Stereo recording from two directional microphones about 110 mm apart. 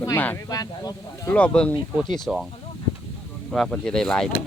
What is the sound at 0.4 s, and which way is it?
Speech, 35° left (ahead or behind).